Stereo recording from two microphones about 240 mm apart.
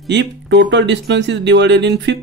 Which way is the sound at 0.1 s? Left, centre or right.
Right.